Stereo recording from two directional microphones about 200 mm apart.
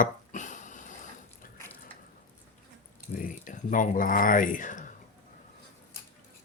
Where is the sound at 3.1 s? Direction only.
40° left (ahead or behind).